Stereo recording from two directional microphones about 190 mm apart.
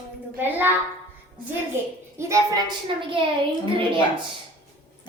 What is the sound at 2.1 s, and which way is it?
Speech, 15° right (ahead or behind).